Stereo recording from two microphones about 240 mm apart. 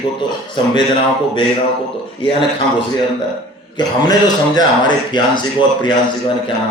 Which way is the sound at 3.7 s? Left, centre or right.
Centre.